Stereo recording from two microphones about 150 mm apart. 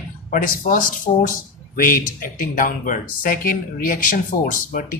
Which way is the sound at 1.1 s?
50° left (ahead or behind).